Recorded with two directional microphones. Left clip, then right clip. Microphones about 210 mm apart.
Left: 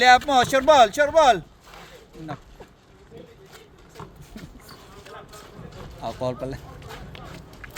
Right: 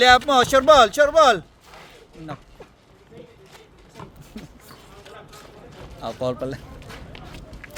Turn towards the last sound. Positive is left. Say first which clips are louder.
# right 2 dB
turn(degrees=-10)  # may be behind; listen again after turning